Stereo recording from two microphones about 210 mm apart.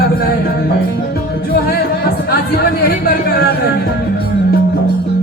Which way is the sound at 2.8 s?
45° left (ahead or behind).